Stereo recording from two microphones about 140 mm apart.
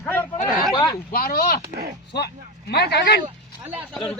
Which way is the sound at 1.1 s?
90° left.